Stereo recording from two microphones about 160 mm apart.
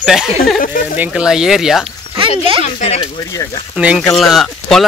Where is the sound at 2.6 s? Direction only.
40° left (ahead or behind).